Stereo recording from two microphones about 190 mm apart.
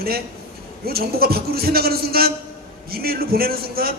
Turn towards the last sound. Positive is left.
turn(degrees=-50)  # may be behind; listen again after turning